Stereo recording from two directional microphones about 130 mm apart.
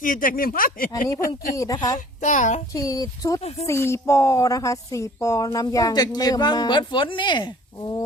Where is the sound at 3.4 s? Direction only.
55° left (ahead or behind).